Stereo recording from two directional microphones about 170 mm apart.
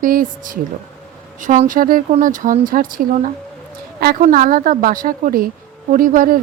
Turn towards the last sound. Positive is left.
turn(degrees=-55)  # may be behind; listen again after turning